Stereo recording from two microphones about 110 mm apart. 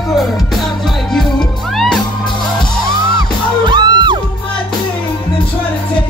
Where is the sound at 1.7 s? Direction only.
Centre (ahead or behind).